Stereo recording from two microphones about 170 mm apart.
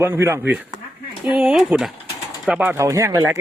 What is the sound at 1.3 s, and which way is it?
Speech, centre (ahead or behind).